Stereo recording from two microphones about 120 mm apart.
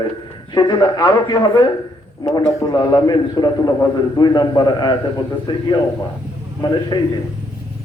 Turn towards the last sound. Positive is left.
turn(degrees=35)  # may be behind; listen again after turning